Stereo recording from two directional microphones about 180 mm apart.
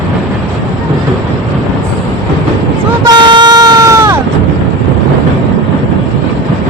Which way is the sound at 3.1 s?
25° right (ahead or behind).